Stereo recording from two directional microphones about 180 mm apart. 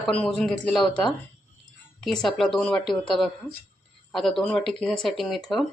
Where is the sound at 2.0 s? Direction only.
5° left (ahead or behind).